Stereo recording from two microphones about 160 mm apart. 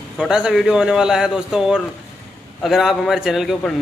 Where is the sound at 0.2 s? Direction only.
5° right (ahead or behind).